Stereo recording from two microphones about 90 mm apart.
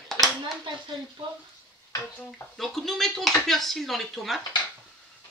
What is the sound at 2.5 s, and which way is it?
Speech, 5° left (ahead or behind).